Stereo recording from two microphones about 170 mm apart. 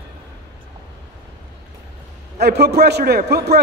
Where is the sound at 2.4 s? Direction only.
70° right (ahead or behind).